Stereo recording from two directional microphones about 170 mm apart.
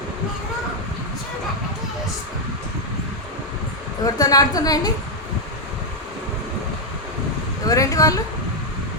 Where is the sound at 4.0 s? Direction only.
20° left (ahead or behind).